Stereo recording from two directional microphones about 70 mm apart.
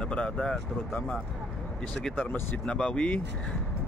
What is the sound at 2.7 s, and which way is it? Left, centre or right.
Speech, centre.